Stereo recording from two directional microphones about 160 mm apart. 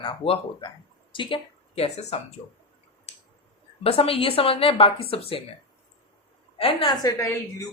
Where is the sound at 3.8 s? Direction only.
35° left (ahead or behind).